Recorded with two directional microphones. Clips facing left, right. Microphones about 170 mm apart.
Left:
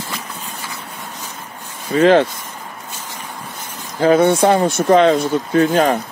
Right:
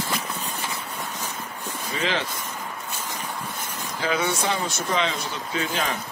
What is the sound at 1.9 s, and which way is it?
Speech, 50° left (ahead or behind).